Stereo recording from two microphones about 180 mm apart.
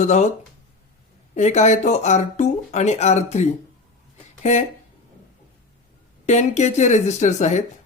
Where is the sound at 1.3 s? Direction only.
40° left (ahead or behind).